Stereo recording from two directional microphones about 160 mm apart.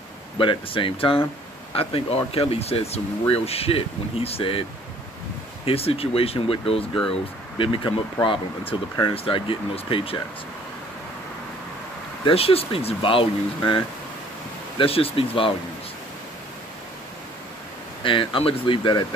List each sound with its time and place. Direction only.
0.4 s speech: 30° left (ahead or behind)
5.7 s speech: 35° left (ahead or behind)
12.3 s speech: 35° left (ahead or behind)
18.0 s speech: 30° left (ahead or behind)